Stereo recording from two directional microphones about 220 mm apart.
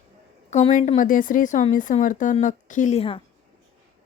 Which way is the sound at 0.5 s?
35° left (ahead or behind).